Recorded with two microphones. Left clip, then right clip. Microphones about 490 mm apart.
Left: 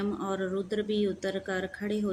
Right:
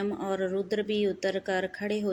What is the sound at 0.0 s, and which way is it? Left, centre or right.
A woman's voice, left.